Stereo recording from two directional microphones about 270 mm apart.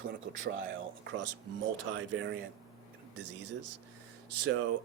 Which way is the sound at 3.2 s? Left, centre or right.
Right.